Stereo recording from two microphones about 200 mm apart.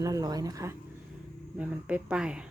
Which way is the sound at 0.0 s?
20° right (ahead or behind).